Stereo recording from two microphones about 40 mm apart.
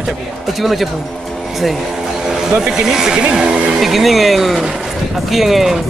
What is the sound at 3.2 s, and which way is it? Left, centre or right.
Speech, right.